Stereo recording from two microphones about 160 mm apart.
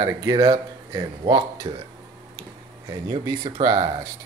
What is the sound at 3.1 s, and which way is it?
Speech, 35° right (ahead or behind).